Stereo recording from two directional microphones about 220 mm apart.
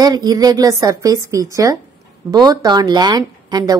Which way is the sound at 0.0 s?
15° right (ahead or behind).